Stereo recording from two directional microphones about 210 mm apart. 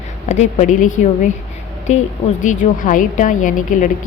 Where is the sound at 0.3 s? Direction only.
35° left (ahead or behind).